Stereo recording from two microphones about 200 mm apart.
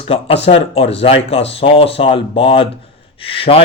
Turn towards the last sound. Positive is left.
turn(degrees=30)  # may be behind; listen again after turning